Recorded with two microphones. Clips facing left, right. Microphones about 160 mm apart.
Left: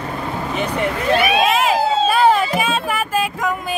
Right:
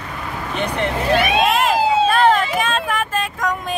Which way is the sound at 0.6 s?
5° left (ahead or behind).